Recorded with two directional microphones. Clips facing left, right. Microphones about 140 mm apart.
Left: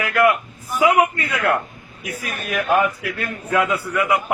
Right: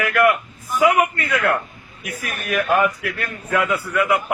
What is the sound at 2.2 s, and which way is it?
A man's voice, 20° left (ahead or behind).